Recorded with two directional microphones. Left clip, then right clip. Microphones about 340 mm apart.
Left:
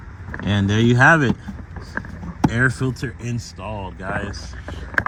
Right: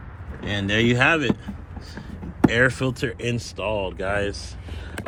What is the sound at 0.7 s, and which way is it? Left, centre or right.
Speech, centre.